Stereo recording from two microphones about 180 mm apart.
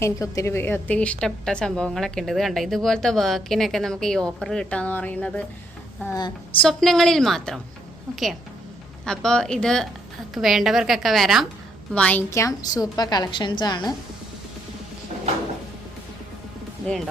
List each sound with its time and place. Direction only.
0.0 s a woman's voice: 15° left (ahead or behind)
6.6 s a woman's voice: 5° left (ahead or behind); by 13.9 s 25° left (ahead or behind)